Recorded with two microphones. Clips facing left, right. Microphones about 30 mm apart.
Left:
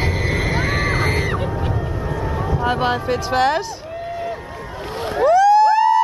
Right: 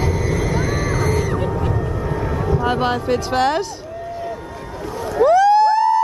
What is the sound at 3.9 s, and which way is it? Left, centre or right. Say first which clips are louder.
Boat: left 3 dB; left.